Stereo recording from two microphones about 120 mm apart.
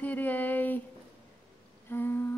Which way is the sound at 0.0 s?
15° left (ahead or behind).